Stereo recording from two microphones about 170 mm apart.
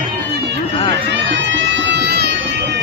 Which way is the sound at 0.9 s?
90° right.